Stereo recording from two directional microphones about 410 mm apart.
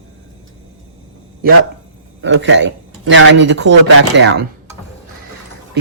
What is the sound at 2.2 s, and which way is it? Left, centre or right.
Speech, right.